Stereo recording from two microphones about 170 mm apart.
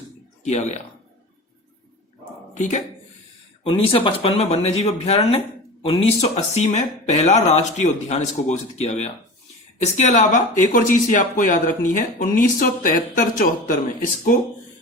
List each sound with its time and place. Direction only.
0.4 s speech: 45° left (ahead or behind)
2.6 s speech: 45° left (ahead or behind)
3.6 s speech: 35° left (ahead or behind); by 13.7 s 55° left (ahead or behind)